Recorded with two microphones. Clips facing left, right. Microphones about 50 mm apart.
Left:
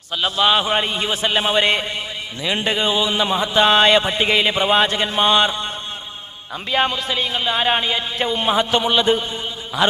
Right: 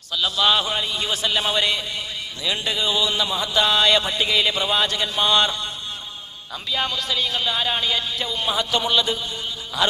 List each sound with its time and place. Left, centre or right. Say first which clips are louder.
0.1 s speech: left 3 dB; left
0.7 s speech: left 5 dB; left
6.7 s speech: left 6 dB; left
6.9 s a man's voice: left 2 dB; left